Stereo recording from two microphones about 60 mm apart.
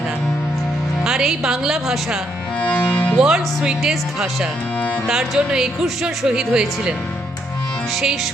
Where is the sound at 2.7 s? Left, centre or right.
Left.